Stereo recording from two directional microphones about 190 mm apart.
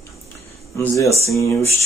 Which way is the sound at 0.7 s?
15° left (ahead or behind).